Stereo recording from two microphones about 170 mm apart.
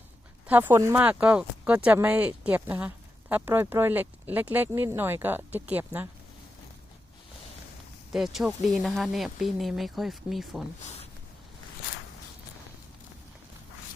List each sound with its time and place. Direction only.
0.4 s speech: 10° right (ahead or behind)
8.1 s speech: centre (ahead or behind)